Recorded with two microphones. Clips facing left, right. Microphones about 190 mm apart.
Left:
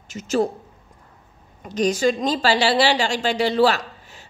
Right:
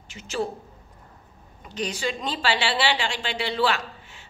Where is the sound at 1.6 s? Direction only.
45° left (ahead or behind).